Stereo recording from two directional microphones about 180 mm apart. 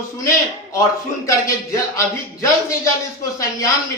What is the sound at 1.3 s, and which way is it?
Speech, 15° left (ahead or behind).